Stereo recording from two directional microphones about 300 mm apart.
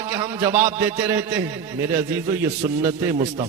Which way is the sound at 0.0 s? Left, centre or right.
Centre.